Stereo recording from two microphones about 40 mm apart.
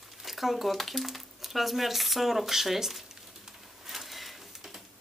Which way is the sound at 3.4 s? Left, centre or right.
Centre.